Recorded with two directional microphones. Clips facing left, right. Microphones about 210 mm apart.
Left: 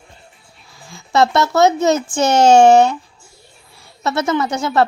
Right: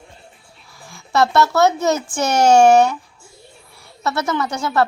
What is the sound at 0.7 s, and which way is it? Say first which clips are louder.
Speech: left 2 dB; 20° left (ahead or behind).